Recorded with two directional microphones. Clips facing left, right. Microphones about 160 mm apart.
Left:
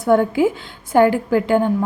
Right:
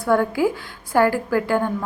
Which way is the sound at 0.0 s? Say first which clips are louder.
Left 4 dB; 20° left (ahead or behind).